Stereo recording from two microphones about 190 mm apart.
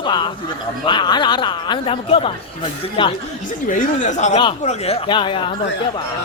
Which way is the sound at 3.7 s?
40° left (ahead or behind).